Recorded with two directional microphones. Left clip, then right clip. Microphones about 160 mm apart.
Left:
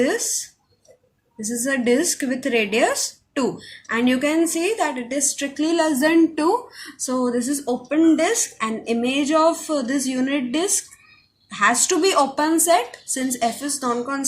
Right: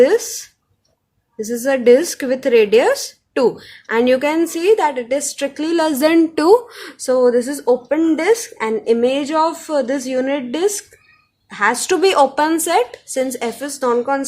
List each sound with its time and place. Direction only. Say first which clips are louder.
0.0 s speech: right 8 dB; 45° right (ahead or behind)